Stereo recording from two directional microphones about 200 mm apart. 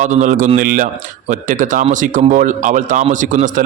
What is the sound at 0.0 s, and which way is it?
Speech, 40° right (ahead or behind).